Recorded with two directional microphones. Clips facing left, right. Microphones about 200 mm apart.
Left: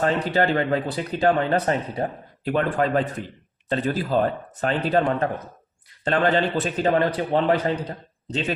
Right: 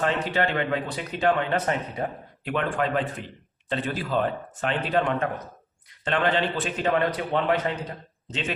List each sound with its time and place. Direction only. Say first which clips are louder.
0.0 s speech: left 4 dB; 35° left (ahead or behind)